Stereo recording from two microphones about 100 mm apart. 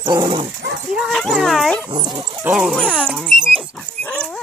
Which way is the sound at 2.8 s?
10° left (ahead or behind).